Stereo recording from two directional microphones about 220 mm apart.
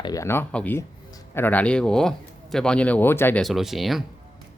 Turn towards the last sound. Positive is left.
turn(degrees=0)  # may be behind; listen again after turning